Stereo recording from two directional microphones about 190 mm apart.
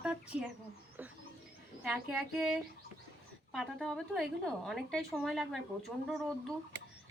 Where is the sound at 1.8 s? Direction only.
5° right (ahead or behind).